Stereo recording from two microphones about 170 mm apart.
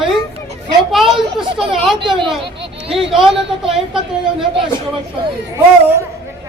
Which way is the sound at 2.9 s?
5° right (ahead or behind).